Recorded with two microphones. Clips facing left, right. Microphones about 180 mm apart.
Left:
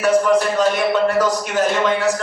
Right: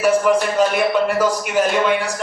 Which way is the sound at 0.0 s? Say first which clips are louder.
Even; 10° right (ahead or behind).